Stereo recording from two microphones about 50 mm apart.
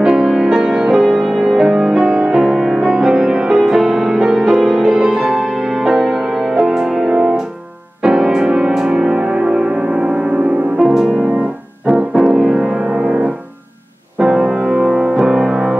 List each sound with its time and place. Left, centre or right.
0.0 s music: centre
10.8 s music: centre
11.8 s music: right
12.2 s music: centre